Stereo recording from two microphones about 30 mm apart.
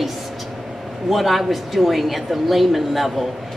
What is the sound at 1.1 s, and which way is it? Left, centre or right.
A woman's voice, centre.